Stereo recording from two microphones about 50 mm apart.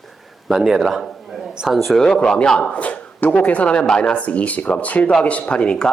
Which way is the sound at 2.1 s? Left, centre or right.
Centre.